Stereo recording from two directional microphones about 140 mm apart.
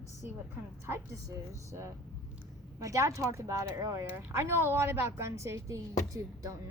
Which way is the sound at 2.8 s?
25° right (ahead or behind).